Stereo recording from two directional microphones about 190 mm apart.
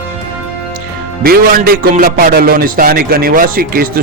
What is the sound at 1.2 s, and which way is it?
A man's voice, 50° right (ahead or behind).